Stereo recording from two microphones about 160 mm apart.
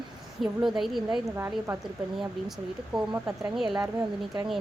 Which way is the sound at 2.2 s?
Centre (ahead or behind).